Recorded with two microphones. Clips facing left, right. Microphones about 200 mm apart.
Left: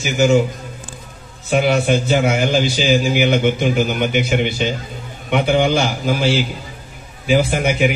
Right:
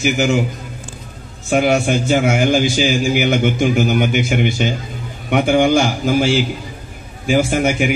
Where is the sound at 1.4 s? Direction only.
45° right (ahead or behind).